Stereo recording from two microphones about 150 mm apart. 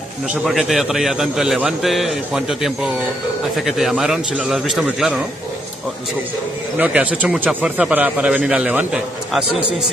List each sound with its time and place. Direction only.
0.3 s a man's voice: centre (ahead or behind)
6.8 s speech: 10° right (ahead or behind)
9.5 s speech: 40° left (ahead or behind)